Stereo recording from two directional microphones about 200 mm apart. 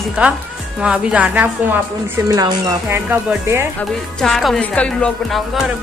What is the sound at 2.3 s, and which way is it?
Speech, 15° right (ahead or behind).